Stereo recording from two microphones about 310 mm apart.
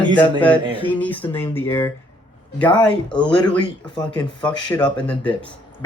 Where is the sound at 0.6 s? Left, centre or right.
Centre.